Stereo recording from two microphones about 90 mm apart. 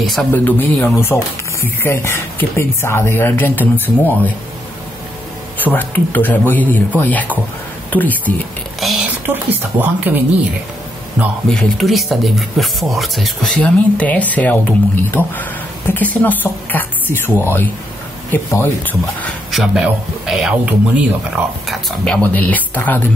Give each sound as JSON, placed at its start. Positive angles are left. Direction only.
{"t": 0.3, "sound": "speech", "side_deg": 20}
{"t": 5.6, "sound": "speech", "side_deg": 20}
{"t": 8.7, "sound": "a sound", "side_deg": 0}
{"t": 9.0, "sound": "speech", "side_deg": -20}
{"t": 11.4, "sound": "speech", "side_deg": 5}
{"t": 13.6, "sound": "speech", "side_deg": 15}
{"t": 19.5, "sound": "speech", "side_deg": -5}
{"t": 21.6, "sound": "speech", "side_deg": 10}
{"t": 22.2, "sound": "speech", "side_deg": 20}